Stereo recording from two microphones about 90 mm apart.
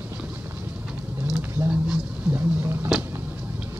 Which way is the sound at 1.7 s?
15° right (ahead or behind).